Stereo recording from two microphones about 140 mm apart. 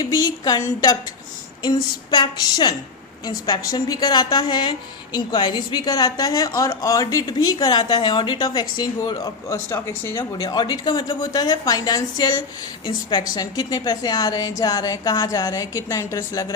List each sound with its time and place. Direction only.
0.0 s a woman's voice: 30° left (ahead or behind)
10.4 s a woman's voice: 30° left (ahead or behind)